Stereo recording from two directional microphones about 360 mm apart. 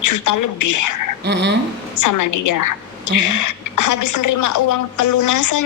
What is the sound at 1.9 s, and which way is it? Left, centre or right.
A woman's voice, left.